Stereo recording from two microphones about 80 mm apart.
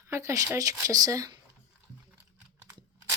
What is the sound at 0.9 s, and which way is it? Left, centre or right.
Speech, right.